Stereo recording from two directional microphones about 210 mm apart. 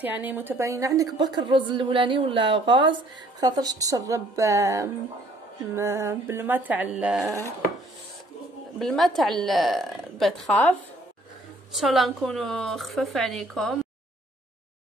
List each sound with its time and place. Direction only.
0.0 s a woman's voice: 10° right (ahead or behind)
8.7 s a woman's voice: centre (ahead or behind)